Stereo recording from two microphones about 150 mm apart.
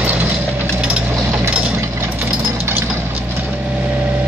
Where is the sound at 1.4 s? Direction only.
20° right (ahead or behind).